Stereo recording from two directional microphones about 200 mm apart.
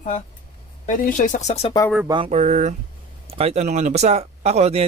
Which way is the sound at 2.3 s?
35° right (ahead or behind).